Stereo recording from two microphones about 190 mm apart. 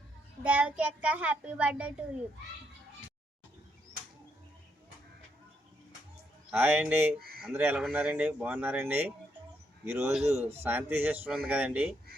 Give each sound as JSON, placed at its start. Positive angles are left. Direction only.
{"t": 0.4, "sound": "a child's voice", "side_deg": -5}
{"t": 6.5, "sound": "a child's voice", "side_deg": -10}
{"t": 7.2, "sound": "speech", "side_deg": -55}
{"t": 7.5, "sound": "a child's voice", "side_deg": -10}